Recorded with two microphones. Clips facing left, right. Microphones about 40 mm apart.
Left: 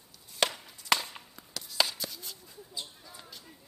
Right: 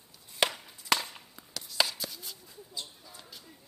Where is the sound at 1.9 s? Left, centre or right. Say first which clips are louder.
Even; centre.